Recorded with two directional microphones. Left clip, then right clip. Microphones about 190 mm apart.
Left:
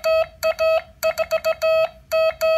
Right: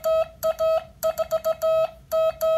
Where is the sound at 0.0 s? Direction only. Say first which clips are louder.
Left 3 dB; 15° left (ahead or behind).